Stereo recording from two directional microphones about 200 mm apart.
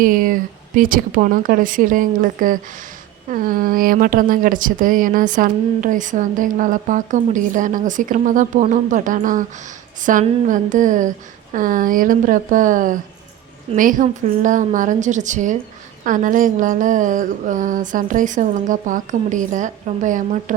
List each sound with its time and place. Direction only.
0.0 s a woman's voice: 45° right (ahead or behind)